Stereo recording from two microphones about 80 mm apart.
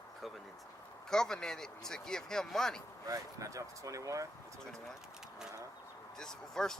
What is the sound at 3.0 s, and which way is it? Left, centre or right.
Speech, right.